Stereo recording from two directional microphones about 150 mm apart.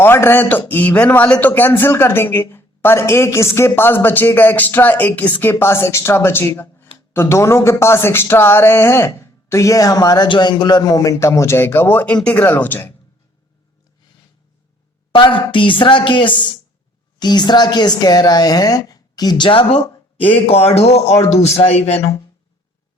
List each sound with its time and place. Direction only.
0.0 s a man's voice: 15° left (ahead or behind)
15.1 s a woman's voice: 35° left (ahead or behind)